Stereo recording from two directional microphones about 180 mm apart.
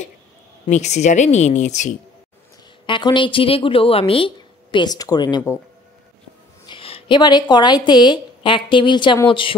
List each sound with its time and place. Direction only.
0.7 s a woman's voice: 40° left (ahead or behind)
2.9 s a woman's voice: 25° left (ahead or behind)
6.6 s a woman's voice: 30° left (ahead or behind)